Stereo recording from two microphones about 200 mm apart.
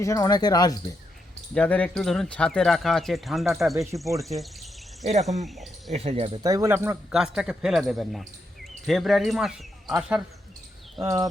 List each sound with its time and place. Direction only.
0.0 s speech: 15° left (ahead or behind)
1.5 s speech: 5° left (ahead or behind)
5.0 s speech: 35° right (ahead or behind); by 10.2 s 5° right (ahead or behind)
11.0 s speech: 15° right (ahead or behind)